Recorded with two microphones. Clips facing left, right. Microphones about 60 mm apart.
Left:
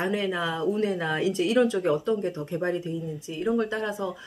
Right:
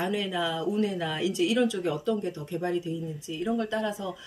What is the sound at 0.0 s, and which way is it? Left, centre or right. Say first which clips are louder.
Speech: left 2 dB; left.